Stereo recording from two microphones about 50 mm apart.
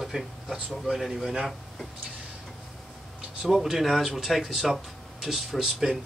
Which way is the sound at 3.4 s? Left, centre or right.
Centre.